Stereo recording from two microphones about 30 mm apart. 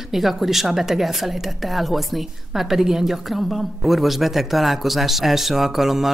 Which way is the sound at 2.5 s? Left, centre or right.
Centre.